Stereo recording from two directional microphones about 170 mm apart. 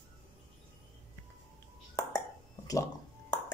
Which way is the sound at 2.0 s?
20° left (ahead or behind).